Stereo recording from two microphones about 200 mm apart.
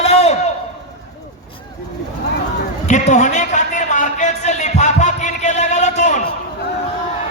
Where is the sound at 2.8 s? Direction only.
35° left (ahead or behind).